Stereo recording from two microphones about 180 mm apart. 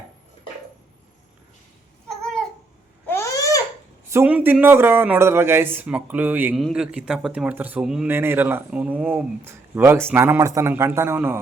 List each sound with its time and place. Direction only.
2.0 s babbling: centre (ahead or behind)
3.1 s babbling: 15° left (ahead or behind)
4.1 s speech: 10° right (ahead or behind)